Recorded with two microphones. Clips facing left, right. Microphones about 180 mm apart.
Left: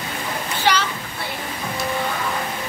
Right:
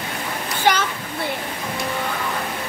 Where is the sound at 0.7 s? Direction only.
50° right (ahead or behind).